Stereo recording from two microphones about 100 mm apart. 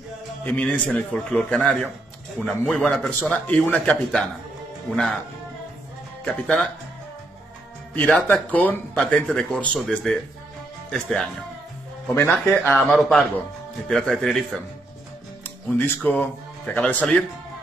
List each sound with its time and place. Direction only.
0.5 s a man's voice: 15° left (ahead or behind)
3.1 s a man's voice: 15° left (ahead or behind)
6.2 s a man's voice: 10° left (ahead or behind)
7.9 s a man's voice: 15° left (ahead or behind)
12.1 s speech: 20° left (ahead or behind)
12.7 s speech: centre (ahead or behind)
15.4 s speech: 20° left (ahead or behind)